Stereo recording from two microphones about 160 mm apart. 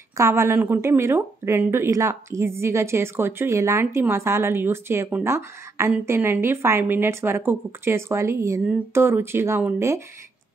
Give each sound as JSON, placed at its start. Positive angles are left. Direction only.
{"t": 0.2, "sound": "speech", "side_deg": -15}